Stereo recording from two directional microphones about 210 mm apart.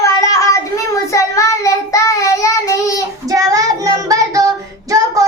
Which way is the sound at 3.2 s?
15° right (ahead or behind).